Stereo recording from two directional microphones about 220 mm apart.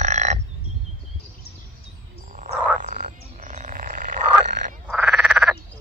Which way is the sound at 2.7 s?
35° right (ahead or behind).